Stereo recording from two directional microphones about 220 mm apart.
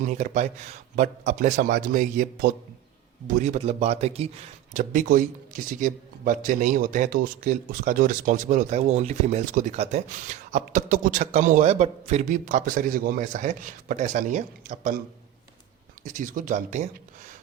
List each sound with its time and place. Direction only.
0.0 s speech: 35° right (ahead or behind)
16.0 s speech: 35° right (ahead or behind)